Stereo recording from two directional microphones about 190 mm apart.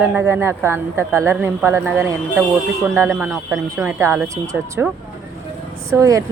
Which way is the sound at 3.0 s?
5° right (ahead or behind).